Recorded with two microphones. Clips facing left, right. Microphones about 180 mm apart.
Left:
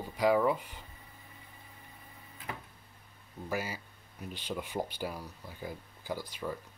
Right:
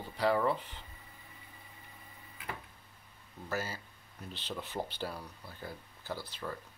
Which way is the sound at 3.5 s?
10° left (ahead or behind).